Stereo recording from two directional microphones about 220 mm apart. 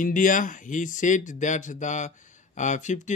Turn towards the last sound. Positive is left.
turn(degrees=35)  # may be behind; listen again after turning